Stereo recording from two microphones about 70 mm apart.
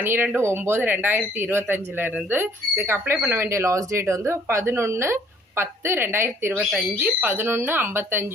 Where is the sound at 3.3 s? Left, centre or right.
Right.